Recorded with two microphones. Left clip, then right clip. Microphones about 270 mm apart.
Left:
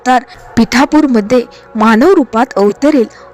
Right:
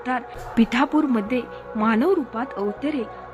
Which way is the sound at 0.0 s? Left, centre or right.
Left.